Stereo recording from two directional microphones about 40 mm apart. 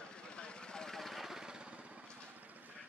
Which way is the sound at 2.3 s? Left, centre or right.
Right.